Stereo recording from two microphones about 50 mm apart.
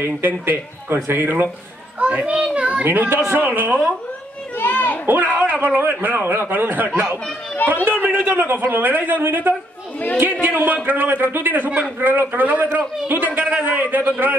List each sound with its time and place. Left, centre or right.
0.0 s speech: right
2.0 s a child's voice: right
2.5 s a sound: right
2.8 s a man's voice: right
4.6 s children playing: left
5.0 s a man's voice: right
5.4 s a sound: right
5.8 s a man's voice: right
7.5 s speech: left
8.0 s a man's voice: right